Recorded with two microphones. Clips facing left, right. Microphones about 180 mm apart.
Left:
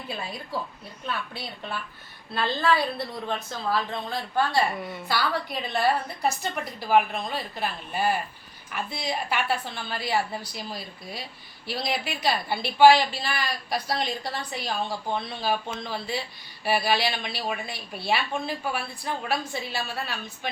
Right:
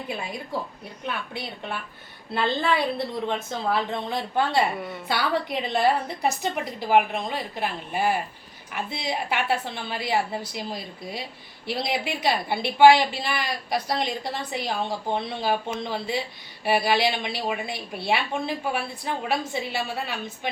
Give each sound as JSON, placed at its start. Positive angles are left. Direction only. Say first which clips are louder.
{"t": 1.0, "sound": "a woman's voice", "louder": "right 1 dB", "side_deg": -20}